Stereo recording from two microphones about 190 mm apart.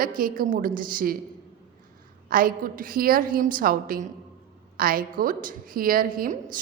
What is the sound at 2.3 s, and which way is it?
A woman's voice, 50° right (ahead or behind).